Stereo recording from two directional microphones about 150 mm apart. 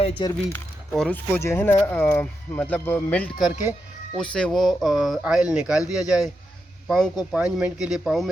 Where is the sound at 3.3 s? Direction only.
5° right (ahead or behind).